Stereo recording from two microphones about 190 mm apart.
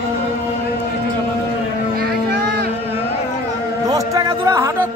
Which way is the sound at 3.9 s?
20° right (ahead or behind).